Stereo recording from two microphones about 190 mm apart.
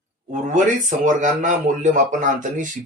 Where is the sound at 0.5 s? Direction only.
40° right (ahead or behind).